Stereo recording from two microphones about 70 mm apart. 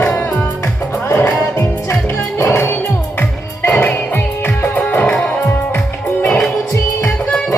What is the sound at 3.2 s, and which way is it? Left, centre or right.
Music, left.